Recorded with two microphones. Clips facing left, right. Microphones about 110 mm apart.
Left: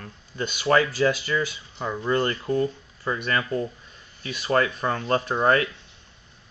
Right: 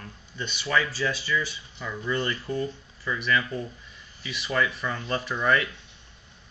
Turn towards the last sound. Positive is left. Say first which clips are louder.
# left 4 dB
turn(degrees=40)  # may be behind; listen again after turning